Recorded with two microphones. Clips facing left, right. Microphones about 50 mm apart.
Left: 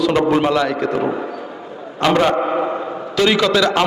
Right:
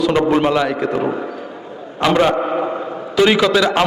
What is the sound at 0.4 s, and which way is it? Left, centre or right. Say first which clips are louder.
A man's voice: even; centre.